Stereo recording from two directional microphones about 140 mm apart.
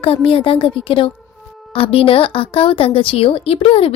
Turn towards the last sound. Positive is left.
turn(degrees=45)  # may be behind; listen again after turning